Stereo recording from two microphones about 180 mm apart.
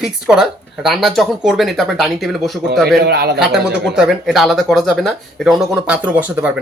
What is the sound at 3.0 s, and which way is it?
Speech, 65° right (ahead or behind).